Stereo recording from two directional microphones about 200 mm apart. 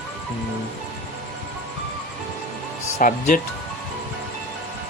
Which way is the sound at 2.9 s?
40° left (ahead or behind).